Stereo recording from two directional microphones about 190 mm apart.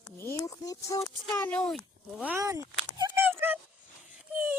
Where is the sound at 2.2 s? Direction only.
15° right (ahead or behind).